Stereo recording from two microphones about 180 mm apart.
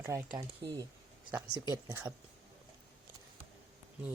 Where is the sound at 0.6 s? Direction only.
25° right (ahead or behind).